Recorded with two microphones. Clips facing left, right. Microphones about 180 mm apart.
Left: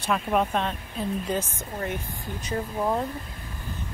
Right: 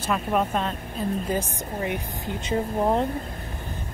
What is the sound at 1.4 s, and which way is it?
Speech, 15° right (ahead or behind).